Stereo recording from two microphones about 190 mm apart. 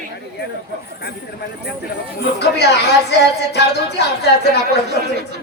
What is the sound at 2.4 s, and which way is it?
A woman's voice, 60° left (ahead or behind).